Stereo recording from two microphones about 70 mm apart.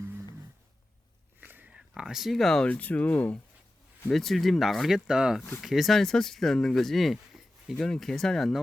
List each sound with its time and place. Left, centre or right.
1.4 s a sound: right
2.0 s speech: centre
2.6 s speech: centre
4.1 s speech: centre